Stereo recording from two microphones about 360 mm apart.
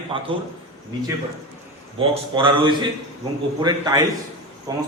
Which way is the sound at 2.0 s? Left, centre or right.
Centre.